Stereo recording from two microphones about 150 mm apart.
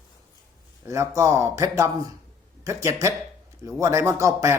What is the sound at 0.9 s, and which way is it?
Speech, 20° right (ahead or behind).